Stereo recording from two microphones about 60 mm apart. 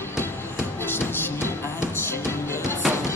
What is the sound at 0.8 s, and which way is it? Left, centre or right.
Music, left.